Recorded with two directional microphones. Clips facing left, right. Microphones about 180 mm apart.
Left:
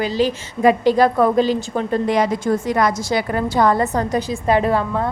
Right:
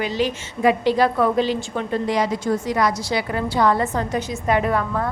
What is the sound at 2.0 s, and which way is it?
A woman's voice, 55° left (ahead or behind).